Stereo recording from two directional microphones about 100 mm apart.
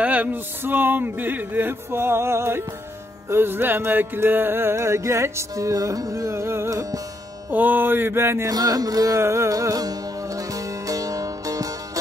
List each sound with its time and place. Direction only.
0.0 s music: 15° right (ahead or behind); by 7.0 s 35° right (ahead or behind)
7.5 s music: 20° right (ahead or behind)
8.5 s music: 40° right (ahead or behind)